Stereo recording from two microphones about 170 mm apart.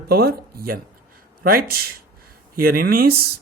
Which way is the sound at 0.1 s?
65° right (ahead or behind).